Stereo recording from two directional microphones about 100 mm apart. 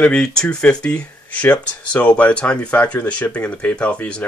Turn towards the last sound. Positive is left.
turn(degrees=10)  # may be behind; listen again after turning